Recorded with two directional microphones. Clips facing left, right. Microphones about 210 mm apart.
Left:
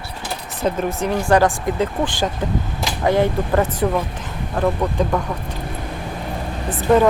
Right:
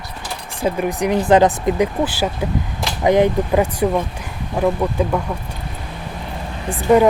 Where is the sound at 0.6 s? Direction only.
15° right (ahead or behind).